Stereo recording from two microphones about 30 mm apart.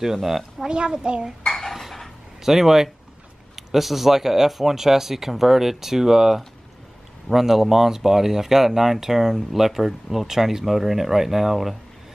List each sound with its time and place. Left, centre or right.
0.0 s speech: centre
0.7 s a child's voice: right
1.7 s dishes: centre
2.4 s speech: centre